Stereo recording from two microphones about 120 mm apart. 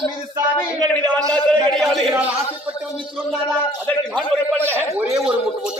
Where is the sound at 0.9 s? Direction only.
10° left (ahead or behind).